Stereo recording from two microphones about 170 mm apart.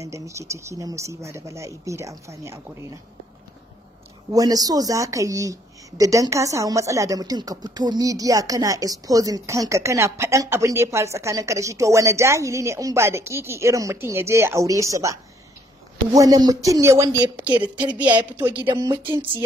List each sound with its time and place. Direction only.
0.0 s speech: 15° right (ahead or behind)
4.3 s speech: 20° right (ahead or behind)